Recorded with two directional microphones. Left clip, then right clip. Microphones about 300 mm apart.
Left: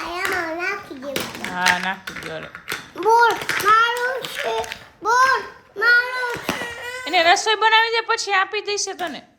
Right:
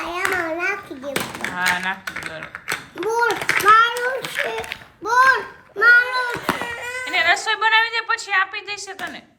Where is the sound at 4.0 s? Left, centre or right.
Centre.